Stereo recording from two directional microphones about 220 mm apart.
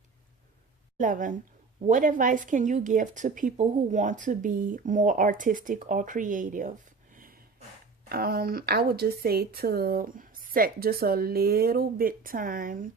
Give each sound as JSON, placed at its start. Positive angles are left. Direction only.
{"t": 0.9, "sound": "a woman's voice", "side_deg": -35}